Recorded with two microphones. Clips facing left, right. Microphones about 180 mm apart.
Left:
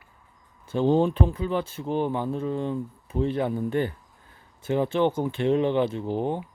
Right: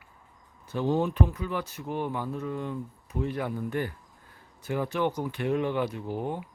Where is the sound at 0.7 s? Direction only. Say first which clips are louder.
Left 5 dB; 30° left (ahead or behind).